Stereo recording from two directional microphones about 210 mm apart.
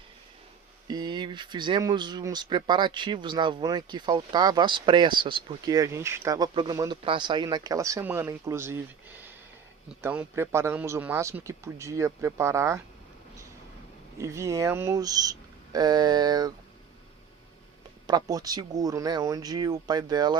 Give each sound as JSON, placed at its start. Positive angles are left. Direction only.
{"t": 0.9, "sound": "a man's voice", "side_deg": -20}
{"t": 14.2, "sound": "a man's voice", "side_deg": -15}
{"t": 18.0, "sound": "speech", "side_deg": -20}